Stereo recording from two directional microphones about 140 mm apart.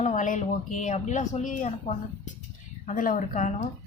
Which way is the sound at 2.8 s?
70° left (ahead or behind).